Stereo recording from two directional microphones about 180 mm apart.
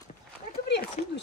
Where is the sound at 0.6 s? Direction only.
70° left (ahead or behind).